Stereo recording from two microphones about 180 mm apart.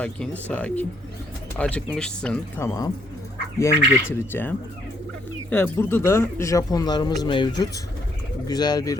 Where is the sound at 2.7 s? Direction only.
20° left (ahead or behind).